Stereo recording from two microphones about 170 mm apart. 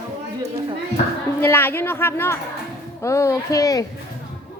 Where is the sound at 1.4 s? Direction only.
15° left (ahead or behind).